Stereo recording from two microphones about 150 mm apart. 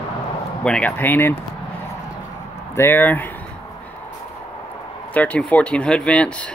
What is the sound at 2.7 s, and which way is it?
Speech, 15° left (ahead or behind).